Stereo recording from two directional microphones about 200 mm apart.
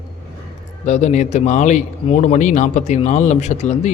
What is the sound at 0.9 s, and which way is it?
A man's voice, 35° left (ahead or behind).